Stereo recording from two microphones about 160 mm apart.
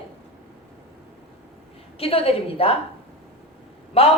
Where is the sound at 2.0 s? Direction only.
35° left (ahead or behind).